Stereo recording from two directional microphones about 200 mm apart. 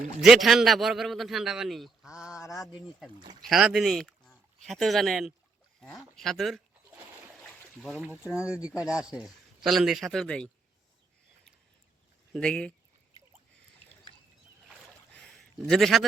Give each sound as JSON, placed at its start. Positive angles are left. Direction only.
{"t": 0.2, "sound": "a man's voice", "side_deg": 0}
{"t": 2.4, "sound": "speech", "side_deg": 15}
{"t": 2.7, "sound": "a man's voice", "side_deg": 0}
{"t": 12.3, "sound": "a man's voice", "side_deg": 5}
{"t": 15.1, "sound": "a sound", "side_deg": 5}